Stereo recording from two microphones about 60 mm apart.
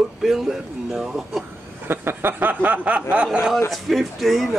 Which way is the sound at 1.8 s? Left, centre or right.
Right.